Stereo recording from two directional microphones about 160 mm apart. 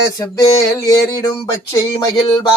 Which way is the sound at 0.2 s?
20° left (ahead or behind).